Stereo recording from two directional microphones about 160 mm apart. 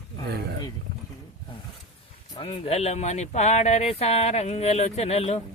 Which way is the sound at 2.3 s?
35° left (ahead or behind).